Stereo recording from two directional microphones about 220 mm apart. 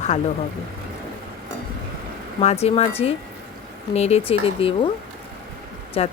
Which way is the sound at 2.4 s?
30° left (ahead or behind).